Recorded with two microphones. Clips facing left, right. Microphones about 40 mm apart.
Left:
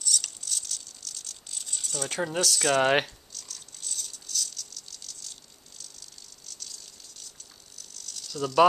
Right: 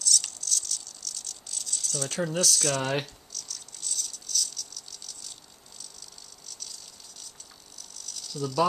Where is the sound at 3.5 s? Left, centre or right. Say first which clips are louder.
Right 1 dB; centre.